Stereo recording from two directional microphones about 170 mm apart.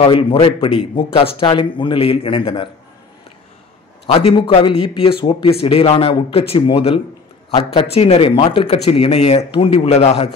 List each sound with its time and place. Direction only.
0.0 s speech: 30° left (ahead or behind)
4.1 s speech: 35° left (ahead or behind)